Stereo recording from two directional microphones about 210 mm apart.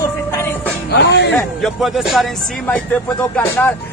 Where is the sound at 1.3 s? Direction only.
Centre (ahead or behind).